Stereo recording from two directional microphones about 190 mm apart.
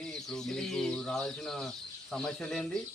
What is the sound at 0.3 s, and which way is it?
Speech, centre (ahead or behind).